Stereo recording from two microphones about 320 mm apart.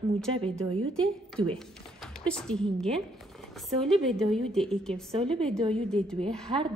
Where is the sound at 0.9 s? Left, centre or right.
Centre.